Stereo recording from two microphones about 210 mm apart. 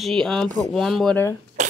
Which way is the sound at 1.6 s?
35° right (ahead or behind).